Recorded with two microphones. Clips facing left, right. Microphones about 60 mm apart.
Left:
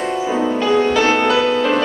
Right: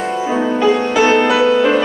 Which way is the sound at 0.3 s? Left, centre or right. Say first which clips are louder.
Right 3 dB; centre.